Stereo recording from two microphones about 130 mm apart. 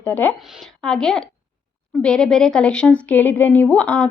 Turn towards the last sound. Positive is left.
turn(degrees=10)  # may be behind; listen again after turning